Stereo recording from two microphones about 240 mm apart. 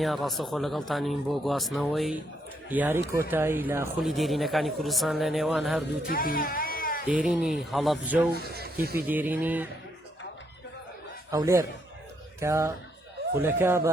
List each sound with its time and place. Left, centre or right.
0.0 s speech: centre
6.1 s music: left
7.1 s speech: centre
8.3 s speech: right
9.0 s speech: centre
11.3 s speech: centre